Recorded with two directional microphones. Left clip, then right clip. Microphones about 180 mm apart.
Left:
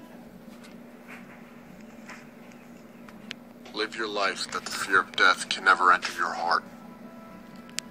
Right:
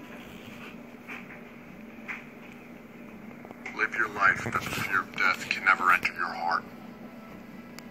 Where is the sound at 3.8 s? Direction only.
65° left (ahead or behind).